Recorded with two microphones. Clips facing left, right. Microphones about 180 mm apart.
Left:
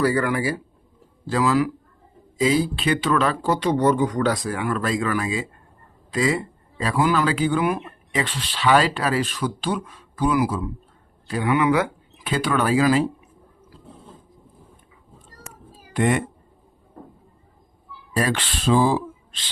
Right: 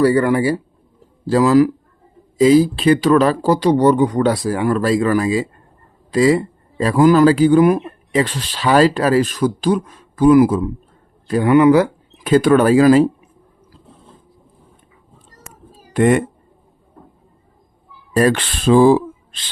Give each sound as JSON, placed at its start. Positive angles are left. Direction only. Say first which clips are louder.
{"t": 0.0, "sound": "speech", "louder": "right 7 dB", "side_deg": -30}
{"t": 1.3, "sound": "speech", "louder": "right 8 dB", "side_deg": -40}
{"t": 15.9, "sound": "speech", "louder": "right 7 dB", "side_deg": -50}
{"t": 18.2, "sound": "speech", "louder": "right 8 dB", "side_deg": -50}